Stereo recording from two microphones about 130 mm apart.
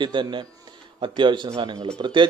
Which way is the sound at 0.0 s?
35° right (ahead or behind).